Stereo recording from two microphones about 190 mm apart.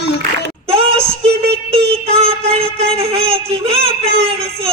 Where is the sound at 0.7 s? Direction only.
30° right (ahead or behind).